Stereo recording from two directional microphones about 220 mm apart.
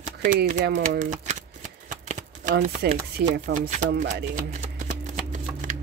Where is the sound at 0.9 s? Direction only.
30° right (ahead or behind).